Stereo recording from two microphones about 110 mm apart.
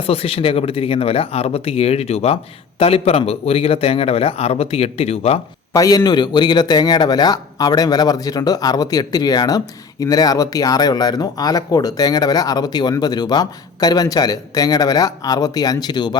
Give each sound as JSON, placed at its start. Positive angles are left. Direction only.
{"t": 0.0, "sound": "speech", "side_deg": 60}
{"t": 5.7, "sound": "speech", "side_deg": 35}